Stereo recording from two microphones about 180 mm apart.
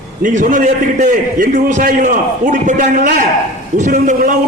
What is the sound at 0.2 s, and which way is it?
A man's voice, 45° right (ahead or behind).